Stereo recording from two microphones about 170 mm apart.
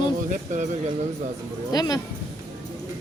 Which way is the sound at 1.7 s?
25° left (ahead or behind).